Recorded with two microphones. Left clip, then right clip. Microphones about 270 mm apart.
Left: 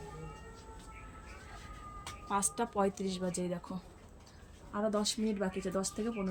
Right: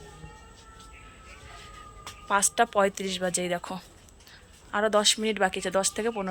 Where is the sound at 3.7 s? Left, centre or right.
Centre.